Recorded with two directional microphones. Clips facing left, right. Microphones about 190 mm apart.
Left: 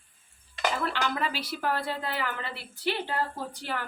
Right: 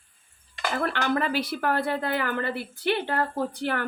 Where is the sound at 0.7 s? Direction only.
55° right (ahead or behind).